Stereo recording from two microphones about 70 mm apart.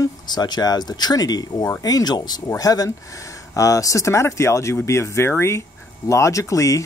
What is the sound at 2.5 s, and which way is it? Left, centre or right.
Speech, left.